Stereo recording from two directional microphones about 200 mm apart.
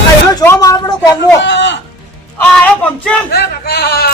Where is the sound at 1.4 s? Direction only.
65° left (ahead or behind).